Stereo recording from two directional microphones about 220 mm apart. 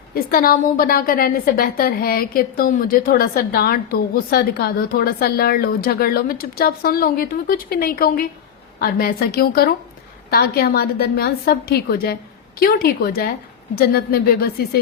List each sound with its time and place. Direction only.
0.1 s a woman's voice: 40° left (ahead or behind)